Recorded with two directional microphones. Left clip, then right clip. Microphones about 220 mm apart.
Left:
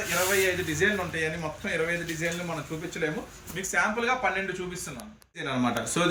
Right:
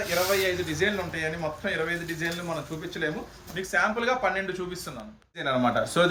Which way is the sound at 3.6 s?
10° right (ahead or behind).